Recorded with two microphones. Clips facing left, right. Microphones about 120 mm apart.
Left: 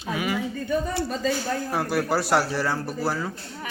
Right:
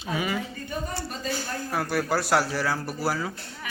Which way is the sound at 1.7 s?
Centre (ahead or behind).